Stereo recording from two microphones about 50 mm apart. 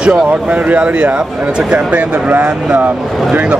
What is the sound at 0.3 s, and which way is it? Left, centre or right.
Speech, right.